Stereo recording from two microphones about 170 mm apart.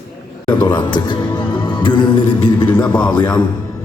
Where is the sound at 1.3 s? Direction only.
30° left (ahead or behind).